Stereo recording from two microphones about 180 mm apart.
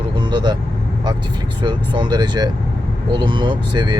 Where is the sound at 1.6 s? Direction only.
25° right (ahead or behind).